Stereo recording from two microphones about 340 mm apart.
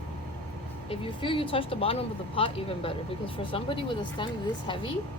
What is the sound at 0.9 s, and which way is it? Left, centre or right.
Speech, centre.